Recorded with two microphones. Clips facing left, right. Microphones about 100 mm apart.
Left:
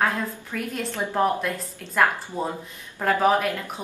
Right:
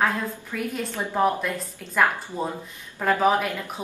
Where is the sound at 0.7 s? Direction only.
5° right (ahead or behind).